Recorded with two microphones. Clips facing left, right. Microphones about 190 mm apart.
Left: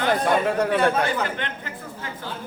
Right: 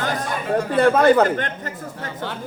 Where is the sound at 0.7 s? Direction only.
55° right (ahead or behind).